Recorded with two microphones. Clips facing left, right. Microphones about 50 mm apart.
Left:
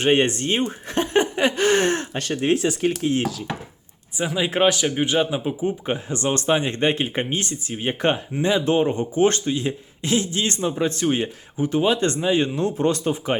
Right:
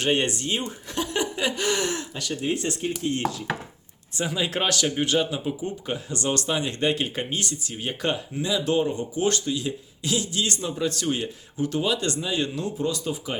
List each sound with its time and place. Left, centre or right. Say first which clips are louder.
0.0 s speech: left 5 dB; left
2.5 s chopping: left 8 dB; left
4.1 s speech: left 3 dB; centre
12.6 s speech: left 6 dB; left